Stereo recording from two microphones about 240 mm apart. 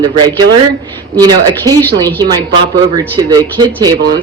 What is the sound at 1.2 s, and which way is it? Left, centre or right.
Speech, centre.